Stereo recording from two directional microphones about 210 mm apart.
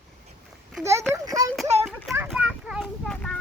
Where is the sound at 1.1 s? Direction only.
15° right (ahead or behind).